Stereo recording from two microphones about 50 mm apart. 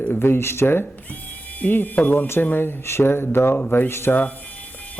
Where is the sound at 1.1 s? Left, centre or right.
Left.